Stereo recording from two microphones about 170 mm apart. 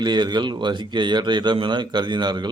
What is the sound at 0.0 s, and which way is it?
Speech, 25° right (ahead or behind).